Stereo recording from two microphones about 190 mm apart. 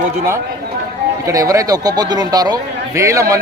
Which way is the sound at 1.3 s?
15° right (ahead or behind).